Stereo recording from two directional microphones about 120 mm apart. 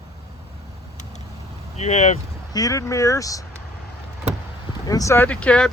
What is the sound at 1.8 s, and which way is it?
Speech, 70° left (ahead or behind).